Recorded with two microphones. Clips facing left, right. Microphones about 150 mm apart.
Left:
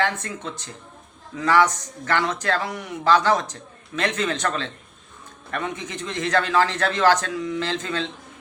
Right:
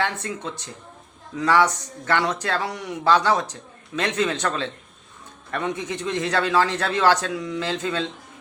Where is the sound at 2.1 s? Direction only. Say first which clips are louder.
Even; 15° right (ahead or behind).